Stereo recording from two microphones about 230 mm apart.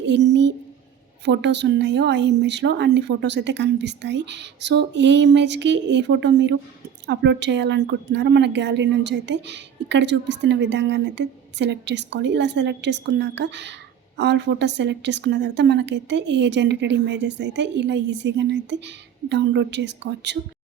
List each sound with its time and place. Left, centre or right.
0.0 s a woman's voice: right